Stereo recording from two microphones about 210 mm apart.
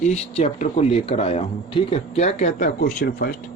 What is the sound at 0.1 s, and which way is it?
Speech, 30° left (ahead or behind).